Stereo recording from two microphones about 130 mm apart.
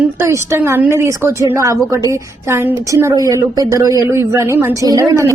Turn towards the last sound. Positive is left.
turn(degrees=-20)  # may be behind; listen again after turning